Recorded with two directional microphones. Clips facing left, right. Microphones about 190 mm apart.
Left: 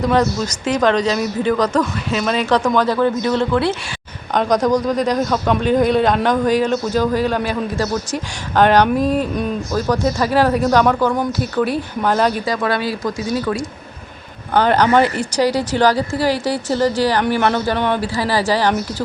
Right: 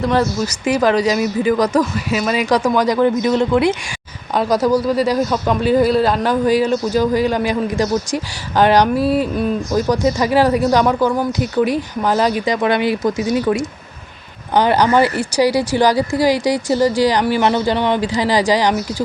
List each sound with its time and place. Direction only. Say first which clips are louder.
0.0 s speech: even; 5° right (ahead or behind)
12.5 s speech: right 3 dB; 20° right (ahead or behind)